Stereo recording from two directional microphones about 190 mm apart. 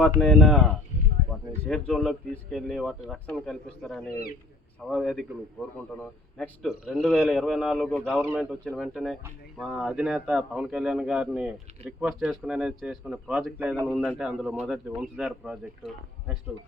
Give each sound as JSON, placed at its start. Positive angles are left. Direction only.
{"t": 0.2, "sound": "speech", "side_deg": 0}
{"t": 8.2, "sound": "speech", "side_deg": -5}